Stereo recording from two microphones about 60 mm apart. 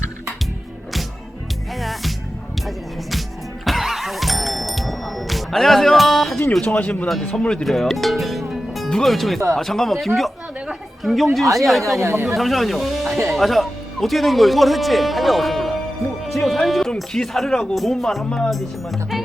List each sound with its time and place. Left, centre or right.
1.8 s music: centre
6.6 s speech: left
7.6 s speech: centre
11.9 s speech: right
12.3 s speech: centre
16.2 s music: centre
16.9 s speech: centre